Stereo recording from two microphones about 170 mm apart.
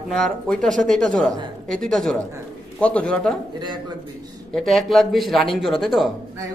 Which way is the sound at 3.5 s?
25° right (ahead or behind).